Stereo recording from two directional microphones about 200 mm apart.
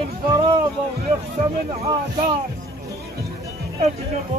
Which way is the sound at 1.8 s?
25° right (ahead or behind).